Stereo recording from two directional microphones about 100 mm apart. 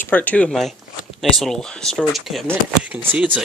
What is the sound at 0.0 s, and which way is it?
Speech, 15° left (ahead or behind).